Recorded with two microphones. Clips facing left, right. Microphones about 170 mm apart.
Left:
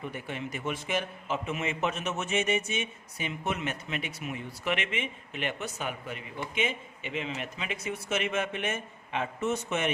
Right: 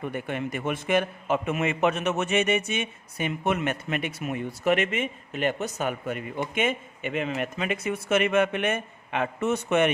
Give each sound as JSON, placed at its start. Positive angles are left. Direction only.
{"t": 0.0, "sound": "a man's voice", "side_deg": -55}